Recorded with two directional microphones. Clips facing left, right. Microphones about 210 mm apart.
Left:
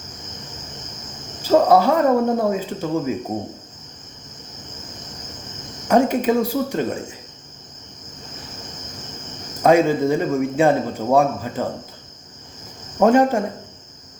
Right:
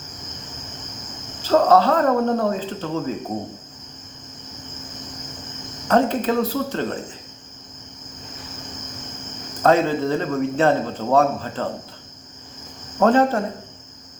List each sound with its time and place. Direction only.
1.4 s a man's voice: 10° left (ahead or behind)
5.9 s a man's voice: 10° left (ahead or behind)
9.6 s a man's voice: 10° left (ahead or behind)
13.0 s a man's voice: 15° left (ahead or behind)